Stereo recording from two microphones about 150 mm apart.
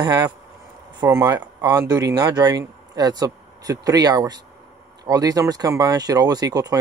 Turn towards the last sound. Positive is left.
turn(degrees=-25)  # may be behind; listen again after turning